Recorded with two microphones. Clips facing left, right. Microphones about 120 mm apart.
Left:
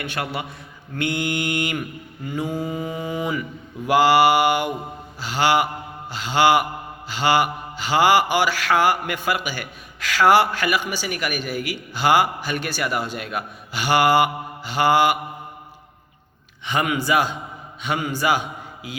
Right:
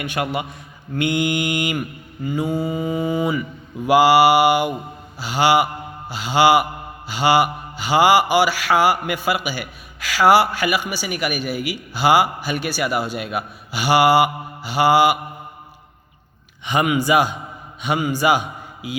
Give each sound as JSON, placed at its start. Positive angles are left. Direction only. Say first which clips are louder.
{"t": 0.0, "sound": "mantra", "louder": "right 4 dB", "side_deg": -15}
{"t": 2.2, "sound": "mantra", "louder": "right 4 dB", "side_deg": 0}
{"t": 16.6, "sound": "mantra", "louder": "right 4 dB", "side_deg": -10}
{"t": 17.8, "sound": "a man's voice", "louder": "right 4 dB", "side_deg": -15}